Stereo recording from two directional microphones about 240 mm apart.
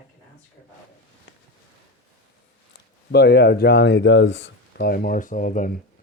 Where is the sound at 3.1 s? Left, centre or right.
Left.